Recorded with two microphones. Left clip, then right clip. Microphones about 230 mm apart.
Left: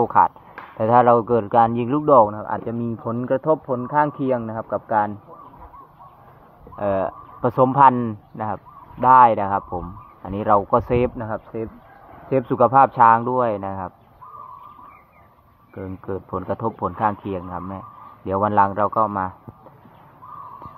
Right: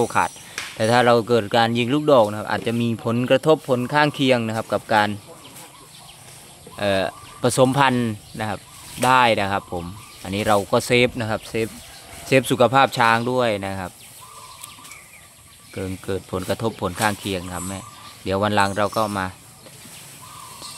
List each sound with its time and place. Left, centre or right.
0.0 s speech: centre
2.2 s speech: right
6.8 s speech: centre
11.1 s speech: right
16.1 s speech: centre